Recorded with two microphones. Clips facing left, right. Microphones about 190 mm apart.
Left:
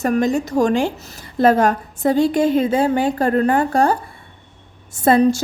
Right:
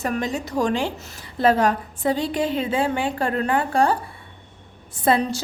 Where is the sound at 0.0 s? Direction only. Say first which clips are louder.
Left 7 dB; 45° left (ahead or behind).